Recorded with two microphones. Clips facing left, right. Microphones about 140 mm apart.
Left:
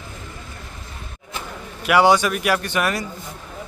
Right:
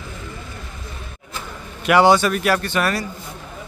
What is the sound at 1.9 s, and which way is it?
Speech, 10° left (ahead or behind).